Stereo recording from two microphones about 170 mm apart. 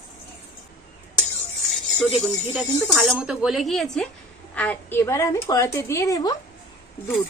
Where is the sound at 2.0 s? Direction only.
Centre (ahead or behind); by 6.3 s 20° left (ahead or behind).